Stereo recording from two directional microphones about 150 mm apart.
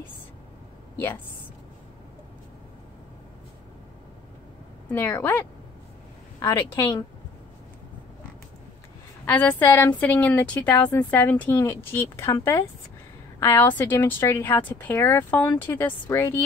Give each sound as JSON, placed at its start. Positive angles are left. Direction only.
{"t": 4.9, "sound": "a woman's voice", "side_deg": 15}
{"t": 6.4, "sound": "a woman's voice", "side_deg": 30}
{"t": 9.2, "sound": "a woman's voice", "side_deg": 10}